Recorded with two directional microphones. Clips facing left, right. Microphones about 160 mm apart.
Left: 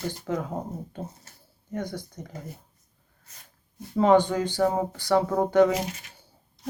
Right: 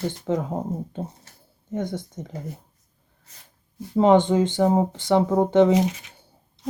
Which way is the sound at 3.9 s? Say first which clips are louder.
Right 3 dB; 20° right (ahead or behind).